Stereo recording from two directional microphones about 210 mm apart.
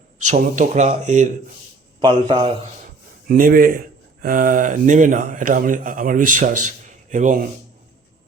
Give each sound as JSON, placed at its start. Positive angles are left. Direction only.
{"t": 0.5, "sound": "speech", "side_deg": -35}
{"t": 2.0, "sound": "a man's voice", "side_deg": -20}
{"t": 3.2, "sound": "speech", "side_deg": -45}
{"t": 6.7, "sound": "a sound", "side_deg": -35}